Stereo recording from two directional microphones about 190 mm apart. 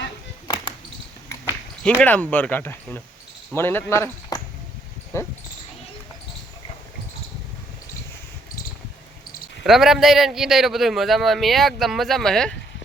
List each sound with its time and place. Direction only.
0.4 s a sound: 20° left (ahead or behind)
1.8 s speech: 5° left (ahead or behind)
9.6 s a man's voice: centre (ahead or behind)